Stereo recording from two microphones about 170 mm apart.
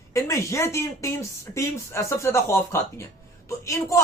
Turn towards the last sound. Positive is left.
turn(degrees=15)  # may be behind; listen again after turning